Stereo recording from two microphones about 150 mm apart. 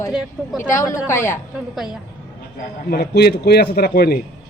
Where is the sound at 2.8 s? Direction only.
90° left.